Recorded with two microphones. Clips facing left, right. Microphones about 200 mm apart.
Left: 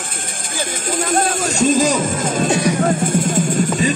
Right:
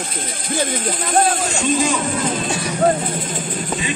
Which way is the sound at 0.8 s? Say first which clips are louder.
Left 2 dB; 45° left (ahead or behind).